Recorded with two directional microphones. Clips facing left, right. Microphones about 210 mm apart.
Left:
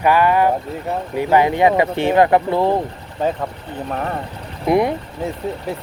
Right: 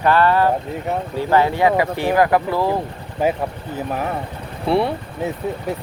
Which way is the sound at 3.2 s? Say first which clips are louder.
Right 1 dB; 10° right (ahead or behind).